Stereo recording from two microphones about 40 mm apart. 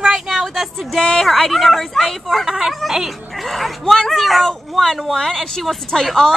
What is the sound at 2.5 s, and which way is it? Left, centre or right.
Speech, centre.